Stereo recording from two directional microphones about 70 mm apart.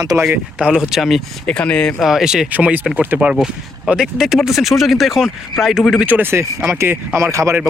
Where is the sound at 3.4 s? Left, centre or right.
Centre.